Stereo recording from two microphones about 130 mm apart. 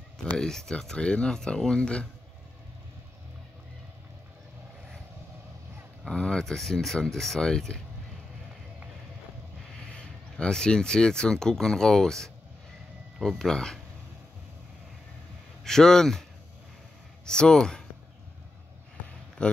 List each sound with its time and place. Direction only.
0.2 s speech: 5° left (ahead or behind)
6.0 s speech: 5° left (ahead or behind)
9.9 s speech: 5° left (ahead or behind)
15.6 s speech: 5° left (ahead or behind)
17.3 s speech: 5° left (ahead or behind)
19.4 s speech: 10° left (ahead or behind)